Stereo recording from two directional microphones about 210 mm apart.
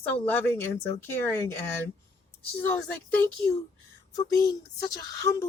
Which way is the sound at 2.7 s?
10° left (ahead or behind).